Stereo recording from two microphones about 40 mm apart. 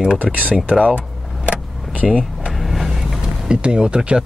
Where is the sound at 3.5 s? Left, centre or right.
Right.